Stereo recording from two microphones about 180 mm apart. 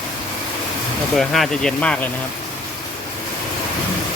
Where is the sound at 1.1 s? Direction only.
Centre (ahead or behind).